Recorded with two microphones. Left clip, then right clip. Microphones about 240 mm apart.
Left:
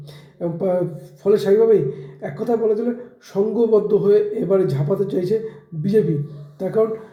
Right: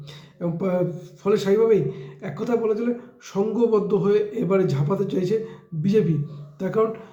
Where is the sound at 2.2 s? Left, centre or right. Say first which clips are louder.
Left 4 dB; centre.